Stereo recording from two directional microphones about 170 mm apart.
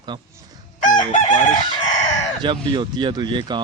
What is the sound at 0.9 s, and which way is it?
Chicken, 50° left (ahead or behind).